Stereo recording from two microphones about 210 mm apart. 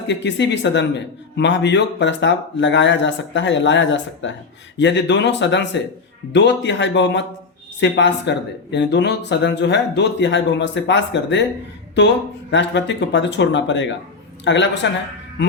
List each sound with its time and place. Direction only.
0.1 s speech: 60° left (ahead or behind)